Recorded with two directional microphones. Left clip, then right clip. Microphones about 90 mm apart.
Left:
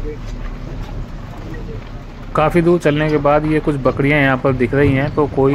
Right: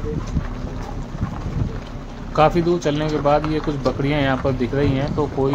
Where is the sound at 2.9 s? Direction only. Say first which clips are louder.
Left 4 dB; 40° left (ahead or behind).